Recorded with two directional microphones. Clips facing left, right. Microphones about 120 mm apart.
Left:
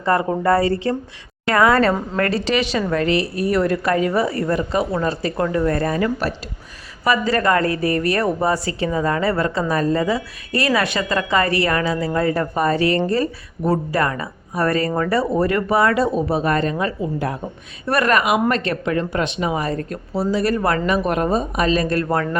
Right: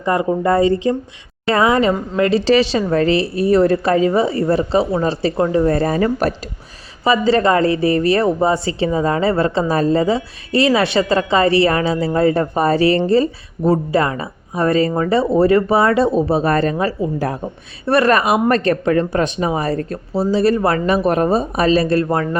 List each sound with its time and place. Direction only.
0.0 s speech: 15° right (ahead or behind)
2.4 s speech: 30° right (ahead or behind)